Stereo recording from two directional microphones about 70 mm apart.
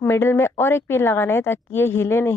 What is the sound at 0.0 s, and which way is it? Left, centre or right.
Speech, left.